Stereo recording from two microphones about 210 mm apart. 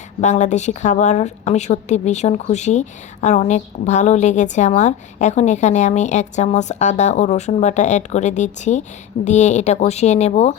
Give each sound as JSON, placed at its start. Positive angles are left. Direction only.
{"t": 0.2, "sound": "a woman's voice", "side_deg": 35}